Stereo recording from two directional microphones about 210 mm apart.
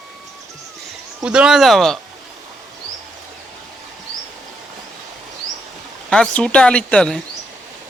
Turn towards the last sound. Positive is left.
turn(degrees=5)  # may be behind; listen again after turning